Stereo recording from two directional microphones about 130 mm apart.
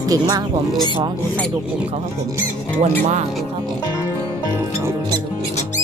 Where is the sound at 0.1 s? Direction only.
30° right (ahead or behind).